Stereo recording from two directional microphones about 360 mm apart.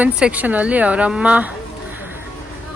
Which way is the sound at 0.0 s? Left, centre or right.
Centre.